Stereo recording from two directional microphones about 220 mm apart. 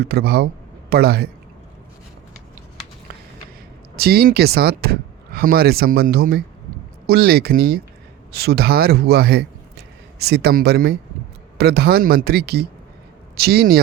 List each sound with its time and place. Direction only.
0.0 s a man's voice: 45° right (ahead or behind)
3.9 s speech: 45° right (ahead or behind)